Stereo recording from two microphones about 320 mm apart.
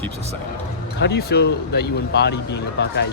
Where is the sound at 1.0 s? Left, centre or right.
Left.